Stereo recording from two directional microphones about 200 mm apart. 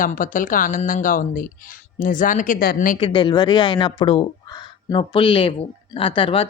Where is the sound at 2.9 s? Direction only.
25° left (ahead or behind).